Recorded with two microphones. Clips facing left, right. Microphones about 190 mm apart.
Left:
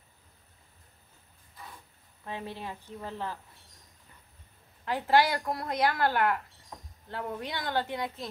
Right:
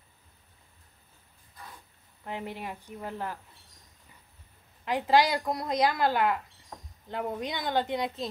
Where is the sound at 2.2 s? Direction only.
15° right (ahead or behind).